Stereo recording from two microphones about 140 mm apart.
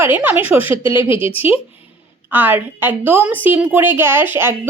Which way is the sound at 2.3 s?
15° right (ahead or behind).